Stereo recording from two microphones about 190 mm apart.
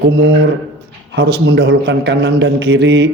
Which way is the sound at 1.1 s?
65° right (ahead or behind).